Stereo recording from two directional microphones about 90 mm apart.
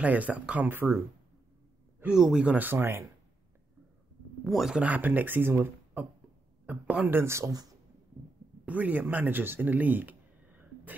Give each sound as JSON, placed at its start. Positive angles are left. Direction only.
{"t": 0.0, "sound": "speech", "side_deg": -15}
{"t": 2.0, "sound": "speech", "side_deg": -5}
{"t": 4.5, "sound": "speech", "side_deg": 0}
{"t": 4.7, "sound": "speech", "side_deg": -15}
{"t": 7.2, "sound": "speech", "side_deg": -30}
{"t": 8.6, "sound": "speech", "side_deg": -20}